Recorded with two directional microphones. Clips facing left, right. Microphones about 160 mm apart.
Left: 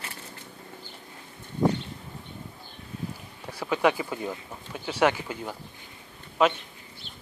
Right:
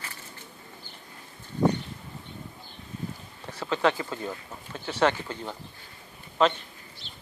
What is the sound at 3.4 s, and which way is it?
Speech, 10° left (ahead or behind).